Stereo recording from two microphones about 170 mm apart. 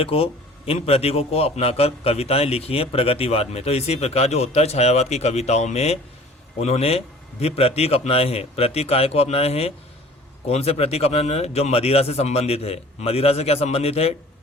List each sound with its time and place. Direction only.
0.0 s a man's voice: 35° left (ahead or behind)